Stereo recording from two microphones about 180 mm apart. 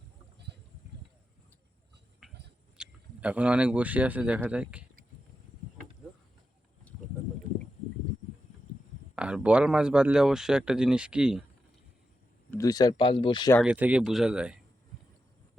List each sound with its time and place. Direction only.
2.2 s a sound: centre (ahead or behind)
2.7 s speech: 5° right (ahead or behind)
6.9 s a sound: 5° left (ahead or behind)
9.1 s speech: 5° right (ahead or behind)
12.5 s speech: 20° left (ahead or behind)
13.6 s speech: 5° right (ahead or behind)